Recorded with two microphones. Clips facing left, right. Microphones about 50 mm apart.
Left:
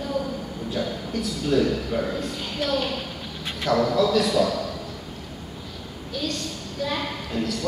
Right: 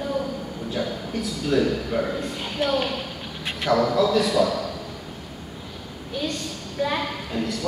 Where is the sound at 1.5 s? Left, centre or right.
Centre.